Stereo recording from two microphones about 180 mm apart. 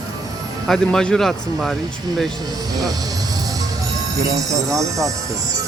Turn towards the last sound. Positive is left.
turn(degrees=-20)  # may be behind; listen again after turning